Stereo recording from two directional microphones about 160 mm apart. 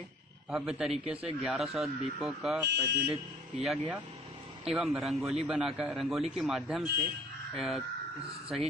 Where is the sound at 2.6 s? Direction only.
90° right.